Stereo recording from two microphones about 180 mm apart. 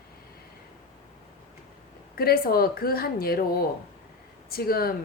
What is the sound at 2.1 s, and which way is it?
A woman's voice, 55° left (ahead or behind).